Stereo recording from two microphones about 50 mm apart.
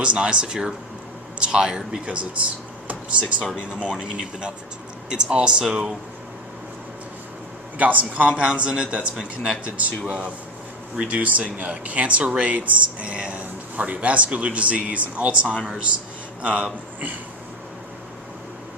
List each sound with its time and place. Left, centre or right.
0.0 s speech: right
2.8 s speech: right; by 5.9 s centre
7.8 s speech: right
9.1 s speech: centre
10.1 s speech: right